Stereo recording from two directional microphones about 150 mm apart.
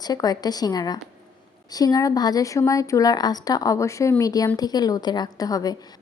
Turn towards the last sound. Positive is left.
turn(degrees=25)  # may be behind; listen again after turning